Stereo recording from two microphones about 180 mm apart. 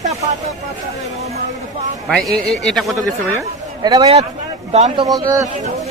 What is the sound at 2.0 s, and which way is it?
Speech, 5° left (ahead or behind).